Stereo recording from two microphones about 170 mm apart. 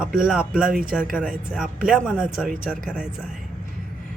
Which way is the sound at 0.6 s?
55° right (ahead or behind).